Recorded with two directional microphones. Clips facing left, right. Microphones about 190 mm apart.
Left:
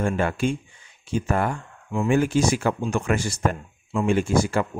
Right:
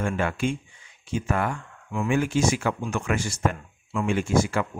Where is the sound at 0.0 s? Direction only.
40° left (ahead or behind).